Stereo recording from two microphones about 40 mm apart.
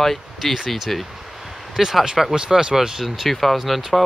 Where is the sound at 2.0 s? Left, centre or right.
Centre.